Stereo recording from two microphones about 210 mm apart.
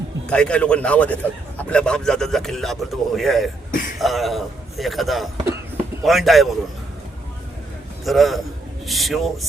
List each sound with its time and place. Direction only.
0.3 s a man's voice: 5° left (ahead or behind)
3.7 s speech: 40° left (ahead or behind)
3.9 s a man's voice: centre (ahead or behind)
8.0 s a man's voice: centre (ahead or behind)